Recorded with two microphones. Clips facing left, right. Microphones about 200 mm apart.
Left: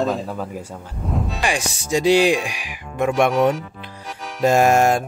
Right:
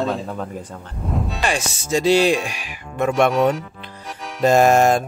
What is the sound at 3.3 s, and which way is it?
Speech, centre (ahead or behind).